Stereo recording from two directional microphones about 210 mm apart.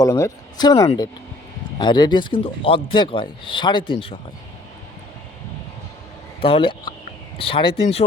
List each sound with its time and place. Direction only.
0.0 s a man's voice: 15° left (ahead or behind)
6.4 s a man's voice: 25° left (ahead or behind)